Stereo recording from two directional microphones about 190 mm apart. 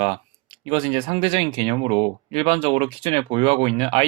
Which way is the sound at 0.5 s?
30° right (ahead or behind).